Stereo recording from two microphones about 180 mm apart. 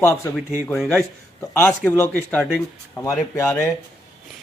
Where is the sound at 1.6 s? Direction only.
10° left (ahead or behind).